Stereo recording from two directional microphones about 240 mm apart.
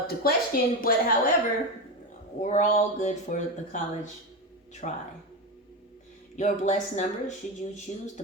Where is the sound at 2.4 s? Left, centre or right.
Left.